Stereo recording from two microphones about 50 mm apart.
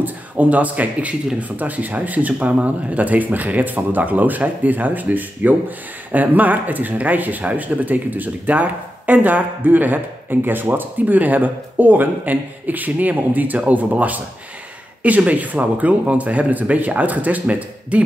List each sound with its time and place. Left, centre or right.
0.0 s a man's voice: right